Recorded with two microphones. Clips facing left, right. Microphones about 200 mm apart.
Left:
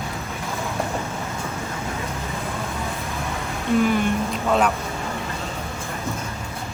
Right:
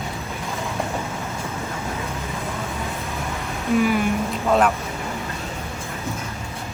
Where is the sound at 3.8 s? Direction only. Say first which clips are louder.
Even; 5° right (ahead or behind).